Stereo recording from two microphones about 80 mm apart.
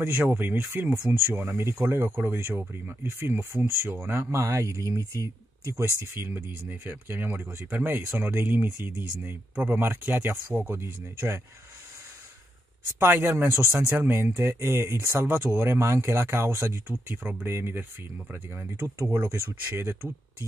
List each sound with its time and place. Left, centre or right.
0.0 s speech: right
4.6 s speech: right
5.9 s speech: right
12.8 s speech: right